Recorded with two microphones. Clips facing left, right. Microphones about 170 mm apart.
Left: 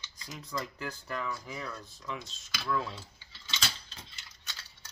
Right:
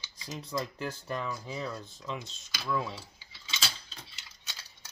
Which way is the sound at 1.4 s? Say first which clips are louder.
Right 4 dB; 25° right (ahead or behind).